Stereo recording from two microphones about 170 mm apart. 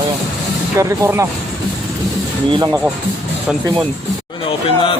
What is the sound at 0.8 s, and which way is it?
Speech, 15° right (ahead or behind).